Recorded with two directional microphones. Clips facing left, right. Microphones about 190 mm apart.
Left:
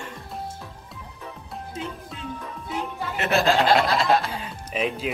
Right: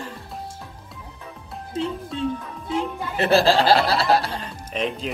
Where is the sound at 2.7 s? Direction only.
30° right (ahead or behind).